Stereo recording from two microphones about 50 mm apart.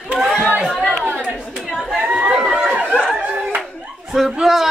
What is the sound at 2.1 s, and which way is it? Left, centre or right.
Chatter, right.